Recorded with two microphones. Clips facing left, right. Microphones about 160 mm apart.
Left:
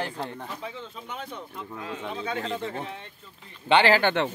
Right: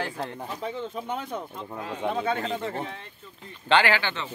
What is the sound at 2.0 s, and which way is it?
Speech, 55° right (ahead or behind).